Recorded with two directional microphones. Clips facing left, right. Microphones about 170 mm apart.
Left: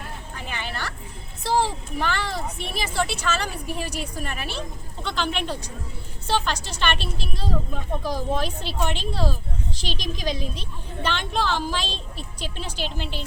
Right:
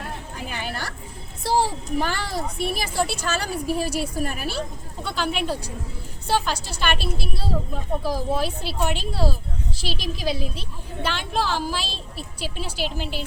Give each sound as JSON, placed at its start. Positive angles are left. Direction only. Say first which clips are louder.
{"t": 1.5, "sound": "a sound", "louder": "right 1 dB", "side_deg": -10}
{"t": 2.0, "sound": "speech", "louder": "even", "side_deg": -40}
{"t": 2.9, "sound": "a woman's voice", "louder": "left 1 dB", "side_deg": -10}
{"t": 3.3, "sound": "speech", "louder": "right 4 dB", "side_deg": -40}
{"t": 3.8, "sound": "a woman's voice", "louder": "right 5 dB", "side_deg": -10}
{"t": 4.2, "sound": "speech", "louder": "right 4 dB", "side_deg": -40}
{"t": 5.0, "sound": "a woman's voice", "louder": "right 1 dB", "side_deg": -10}